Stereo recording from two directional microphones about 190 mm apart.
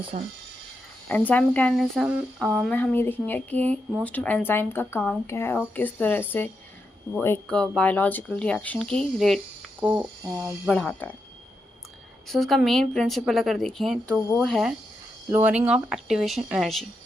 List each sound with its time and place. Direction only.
0.1 s speech: 40° right (ahead or behind)
1.0 s a woman's voice: 10° left (ahead or behind)
9.8 s mechanisms: 5° right (ahead or behind)
10.7 s a woman's voice: 5° left (ahead or behind)
12.3 s a woman's voice: centre (ahead or behind)